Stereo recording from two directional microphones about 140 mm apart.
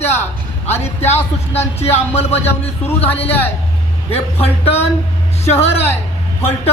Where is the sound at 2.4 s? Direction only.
15° left (ahead or behind).